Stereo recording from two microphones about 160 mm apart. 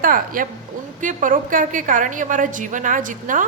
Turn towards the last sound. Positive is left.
turn(degrees=-55)  # may be behind; listen again after turning